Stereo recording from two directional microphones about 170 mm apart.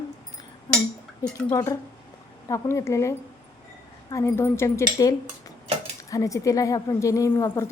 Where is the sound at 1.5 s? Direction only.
20° left (ahead or behind).